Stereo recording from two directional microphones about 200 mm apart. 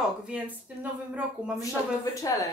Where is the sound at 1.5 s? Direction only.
15° left (ahead or behind).